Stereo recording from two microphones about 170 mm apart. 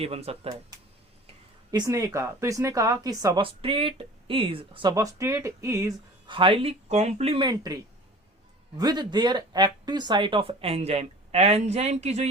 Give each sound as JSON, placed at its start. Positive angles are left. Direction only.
{"t": 0.0, "sound": "speech", "side_deg": -35}
{"t": 1.7, "sound": "speech", "side_deg": -20}
{"t": 6.2, "sound": "speech", "side_deg": -30}
{"t": 8.8, "sound": "speech", "side_deg": -25}